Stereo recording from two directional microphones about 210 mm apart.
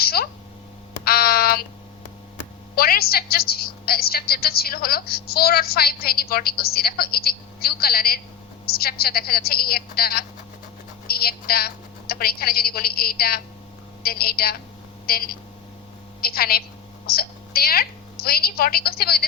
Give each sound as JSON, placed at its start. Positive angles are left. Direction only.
{"t": 0.0, "sound": "speech", "side_deg": 45}
{"t": 1.0, "sound": "a sound", "side_deg": 45}
{"t": 2.7, "sound": "a woman's voice", "side_deg": 45}